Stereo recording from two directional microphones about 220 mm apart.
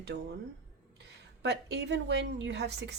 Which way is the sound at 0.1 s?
50° right (ahead or behind).